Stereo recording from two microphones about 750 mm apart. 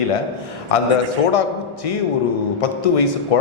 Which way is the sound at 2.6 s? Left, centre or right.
Left.